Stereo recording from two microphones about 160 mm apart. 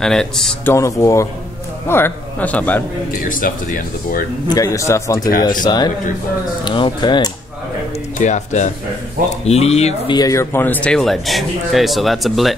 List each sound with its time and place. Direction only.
0.0 s a man's voice: 5° left (ahead or behind)
0.7 s a man's voice: 20° left (ahead or behind)
3.1 s speech: 60° left (ahead or behind)
4.5 s a man's voice: 20° left (ahead or behind)
8.2 s speech: 50° left (ahead or behind)
10.1 s a man's voice: 20° left (ahead or behind); by 12.5 s centre (ahead or behind)